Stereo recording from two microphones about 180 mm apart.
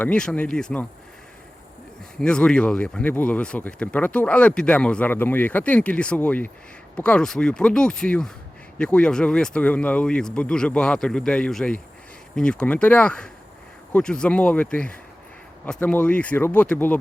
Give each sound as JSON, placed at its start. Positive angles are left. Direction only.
{"t": 0.0, "sound": "speech", "side_deg": 5}
{"t": 2.1, "sound": "speech", "side_deg": 5}